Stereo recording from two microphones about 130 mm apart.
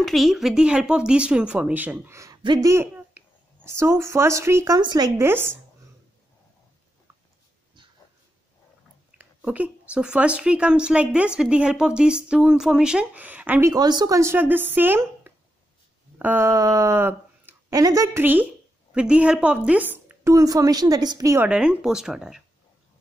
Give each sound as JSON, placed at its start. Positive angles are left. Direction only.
{"t": 0.0, "sound": "speech", "side_deg": 0}
{"t": 2.4, "sound": "speech", "side_deg": -35}
{"t": 2.7, "sound": "speech", "side_deg": -20}
{"t": 5.2, "sound": "speech", "side_deg": -15}
{"t": 9.2, "sound": "speech", "side_deg": -10}
{"t": 13.7, "sound": "a woman's voice", "side_deg": -30}
{"t": 20.3, "sound": "a woman's voice", "side_deg": -30}
{"t": 21.5, "sound": "speech", "side_deg": -5}